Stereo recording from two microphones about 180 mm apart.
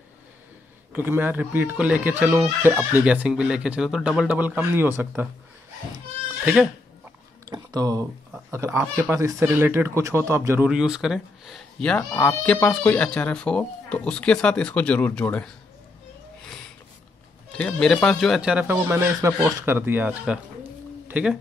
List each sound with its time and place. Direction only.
0.9 s speech: 10° right (ahead or behind)
6.4 s speech: 5° right (ahead or behind)
7.4 s a sound: 20° right (ahead or behind)
8.3 s speech: 15° right (ahead or behind)
10.7 s speech: 5° right (ahead or behind)
17.5 s a man's voice: 5° left (ahead or behind)